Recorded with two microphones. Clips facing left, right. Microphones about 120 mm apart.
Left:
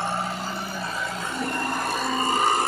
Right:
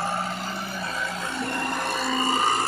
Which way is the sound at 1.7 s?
5° left (ahead or behind).